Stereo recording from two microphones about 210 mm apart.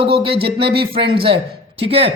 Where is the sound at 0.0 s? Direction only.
25° right (ahead or behind).